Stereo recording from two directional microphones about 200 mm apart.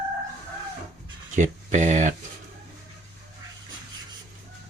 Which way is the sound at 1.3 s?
40° right (ahead or behind).